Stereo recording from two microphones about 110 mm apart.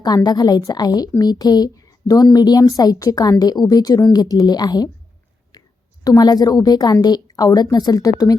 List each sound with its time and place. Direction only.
0.0 s a woman's voice: 35° left (ahead or behind)
6.1 s a woman's voice: 35° left (ahead or behind)